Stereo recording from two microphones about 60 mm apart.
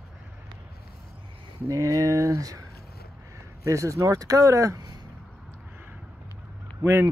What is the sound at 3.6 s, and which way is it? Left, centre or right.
Speech, right.